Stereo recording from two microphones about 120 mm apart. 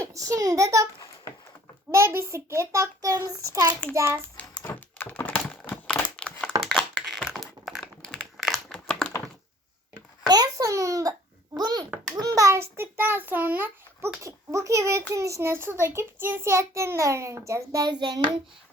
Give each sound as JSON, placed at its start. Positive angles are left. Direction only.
{"t": 0.0, "sound": "a child's voice", "side_deg": -25}
{"t": 1.9, "sound": "a child's voice", "side_deg": -20}
{"t": 4.4, "sound": "typing", "side_deg": 15}
{"t": 6.6, "sound": "a sound", "side_deg": 5}
{"t": 7.0, "sound": "typing", "side_deg": 0}
{"t": 10.2, "sound": "babbling", "side_deg": -30}
{"t": 11.5, "sound": "a sound", "side_deg": -35}
{"t": 12.2, "sound": "child singing", "side_deg": -30}
{"t": 15.1, "sound": "a child's voice", "side_deg": -25}